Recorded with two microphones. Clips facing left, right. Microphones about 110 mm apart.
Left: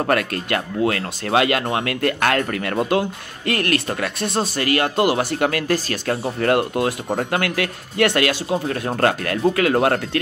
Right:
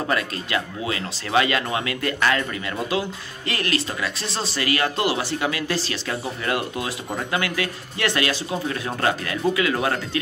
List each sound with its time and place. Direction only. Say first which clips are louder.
0.0 s speech: left 5 dB; 55° left (ahead or behind)